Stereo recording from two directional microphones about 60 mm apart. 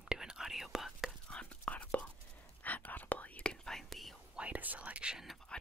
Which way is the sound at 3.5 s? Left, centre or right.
Centre.